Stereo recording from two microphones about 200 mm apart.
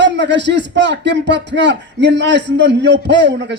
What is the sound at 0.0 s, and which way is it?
Speech, 60° right (ahead or behind).